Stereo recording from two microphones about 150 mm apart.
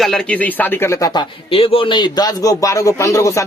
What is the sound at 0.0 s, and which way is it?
A man's voice, 5° left (ahead or behind).